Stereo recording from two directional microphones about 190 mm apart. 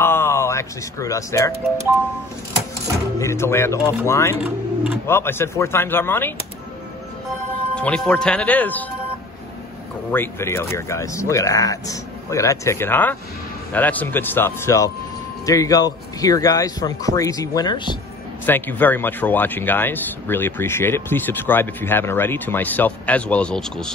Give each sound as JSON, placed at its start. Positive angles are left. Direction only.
{"t": 0.0, "sound": "speech", "side_deg": 15}
{"t": 3.2, "sound": "speech", "side_deg": 15}
{"t": 7.7, "sound": "speech", "side_deg": 5}
{"t": 10.1, "sound": "speech", "side_deg": 15}
{"t": 18.4, "sound": "speech", "side_deg": 10}